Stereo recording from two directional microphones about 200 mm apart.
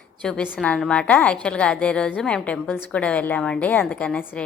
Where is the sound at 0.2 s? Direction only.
5° left (ahead or behind).